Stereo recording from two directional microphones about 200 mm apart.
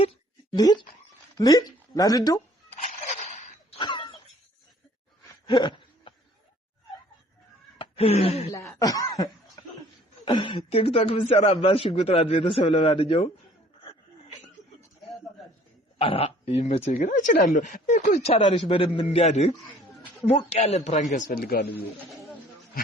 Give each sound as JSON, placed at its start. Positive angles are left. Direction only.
{"t": 0.5, "sound": "a man's voice", "side_deg": 20}
{"t": 3.3, "sound": "a sound", "side_deg": 35}
{"t": 3.8, "sound": "cough", "side_deg": 20}
{"t": 5.5, "sound": "a sound", "side_deg": 20}
{"t": 7.8, "sound": "speech", "side_deg": 30}
{"t": 8.8, "sound": "cough", "side_deg": 15}
{"t": 10.2, "sound": "a man's voice", "side_deg": 25}
{"t": 16.0, "sound": "a man's voice", "side_deg": 30}
{"t": 19.5, "sound": "a sound", "side_deg": 0}
{"t": 20.2, "sound": "speech", "side_deg": 30}
{"t": 21.9, "sound": "speech", "side_deg": 0}